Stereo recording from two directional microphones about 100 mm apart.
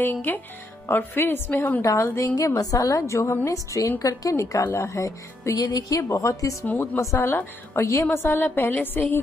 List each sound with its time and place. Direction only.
0.0 s a woman's voice: 20° left (ahead or behind)
1.8 s a woman's voice: 30° left (ahead or behind)
2.3 s speech: 35° left (ahead or behind)
6.6 s a woman's voice: 15° left (ahead or behind)
7.0 s a woman's voice: 25° left (ahead or behind)